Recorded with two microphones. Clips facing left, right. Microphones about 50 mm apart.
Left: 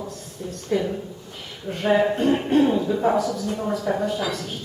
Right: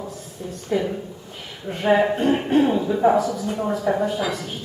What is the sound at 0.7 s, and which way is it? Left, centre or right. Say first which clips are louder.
Mantra: right 1 dB; centre.